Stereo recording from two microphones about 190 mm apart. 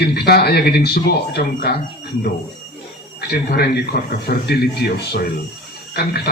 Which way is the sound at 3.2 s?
55° left (ahead or behind).